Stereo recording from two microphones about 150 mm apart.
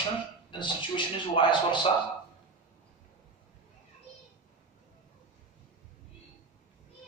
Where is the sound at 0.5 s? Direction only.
35° left (ahead or behind).